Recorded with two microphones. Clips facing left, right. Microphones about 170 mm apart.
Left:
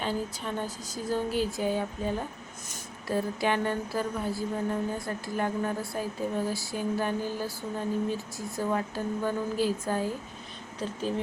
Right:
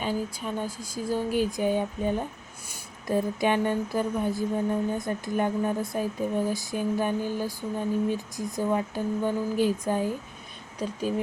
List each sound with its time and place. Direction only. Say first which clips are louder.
0.0 s speech: right 2 dB; 10° right (ahead or behind)